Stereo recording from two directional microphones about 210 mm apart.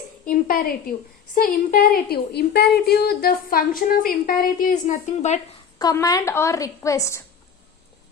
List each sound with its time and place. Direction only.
0.3 s a woman's voice: 40° left (ahead or behind)
5.8 s a woman's voice: 15° left (ahead or behind)